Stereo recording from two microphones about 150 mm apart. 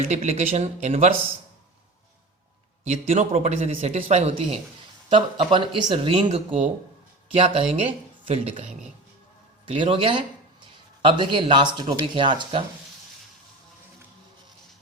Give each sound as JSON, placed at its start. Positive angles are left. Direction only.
{"t": 0.0, "sound": "speech", "side_deg": -45}
{"t": 2.8, "sound": "speech", "side_deg": -50}
{"t": 6.2, "sound": "speech", "side_deg": -50}
{"t": 9.6, "sound": "speech", "side_deg": -35}